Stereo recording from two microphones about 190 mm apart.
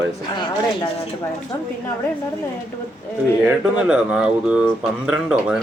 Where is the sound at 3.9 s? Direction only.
5° right (ahead or behind).